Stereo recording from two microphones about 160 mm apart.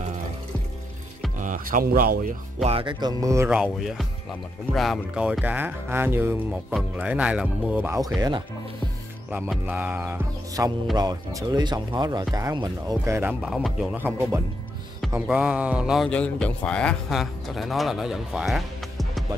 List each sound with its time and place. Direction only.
1.4 s speech: 60° right (ahead or behind)
2.6 s speech: 35° right (ahead or behind)
3.4 s speech: 5° right (ahead or behind)
8.2 s speech: 30° right (ahead or behind)
9.3 s speech: 10° right (ahead or behind)
16.1 s speech: 5° left (ahead or behind)